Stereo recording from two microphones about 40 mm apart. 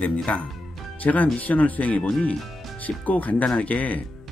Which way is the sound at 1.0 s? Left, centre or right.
Left.